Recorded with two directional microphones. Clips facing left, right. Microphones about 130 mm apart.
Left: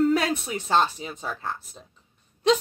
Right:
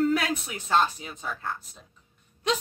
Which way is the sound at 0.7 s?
30° left (ahead or behind).